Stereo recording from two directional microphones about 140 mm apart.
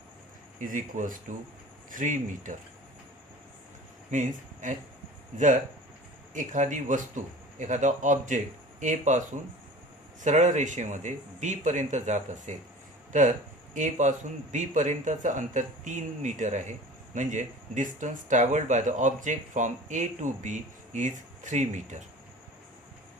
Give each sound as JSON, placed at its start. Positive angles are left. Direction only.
{"t": 0.6, "sound": "speech", "side_deg": -70}
{"t": 4.1, "sound": "speech", "side_deg": -60}
{"t": 6.3, "sound": "speech", "side_deg": -60}
{"t": 10.2, "sound": "speech", "side_deg": -60}